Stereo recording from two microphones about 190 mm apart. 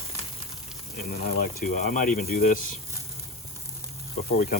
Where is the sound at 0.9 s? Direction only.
45° left (ahead or behind).